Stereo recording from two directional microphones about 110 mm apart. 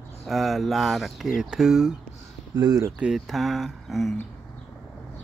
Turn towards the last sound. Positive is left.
turn(degrees=0)  # may be behind; listen again after turning